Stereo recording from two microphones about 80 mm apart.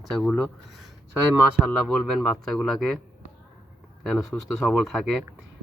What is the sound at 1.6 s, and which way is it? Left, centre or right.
Speech, centre.